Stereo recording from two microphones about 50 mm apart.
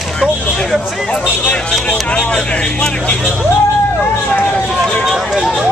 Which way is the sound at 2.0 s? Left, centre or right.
Left.